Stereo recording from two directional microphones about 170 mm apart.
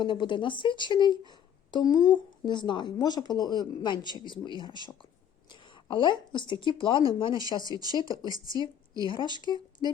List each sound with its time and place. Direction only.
0.0 s speech: 25° left (ahead or behind)
7.6 s a woman's voice: 20° right (ahead or behind)
9.8 s speech: 25° left (ahead or behind)